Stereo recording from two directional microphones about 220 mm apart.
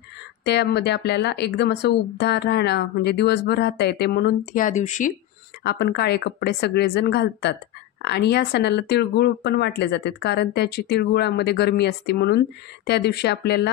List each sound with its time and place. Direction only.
0.5 s speech: 50° left (ahead or behind); by 5.1 s 35° left (ahead or behind)
5.6 s speech: 50° left (ahead or behind)